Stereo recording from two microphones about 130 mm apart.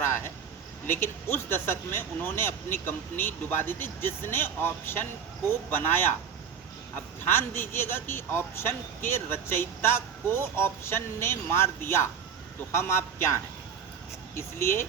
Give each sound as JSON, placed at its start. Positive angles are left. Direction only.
{"t": 0.9, "sound": "speech", "side_deg": 15}
{"t": 7.3, "sound": "a man's voice", "side_deg": 15}
{"t": 14.3, "sound": "a man's voice", "side_deg": 20}